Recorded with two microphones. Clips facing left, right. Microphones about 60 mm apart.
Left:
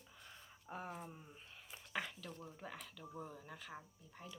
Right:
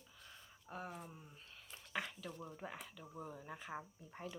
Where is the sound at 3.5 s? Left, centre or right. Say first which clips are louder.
Right 4 dB; right.